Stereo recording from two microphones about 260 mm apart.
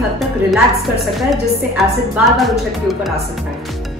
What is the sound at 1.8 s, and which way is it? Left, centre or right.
Speech, centre.